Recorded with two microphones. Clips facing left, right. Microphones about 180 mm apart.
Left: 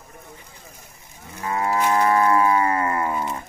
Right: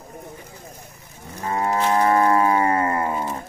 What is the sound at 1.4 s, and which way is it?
Livestock, 40° right (ahead or behind).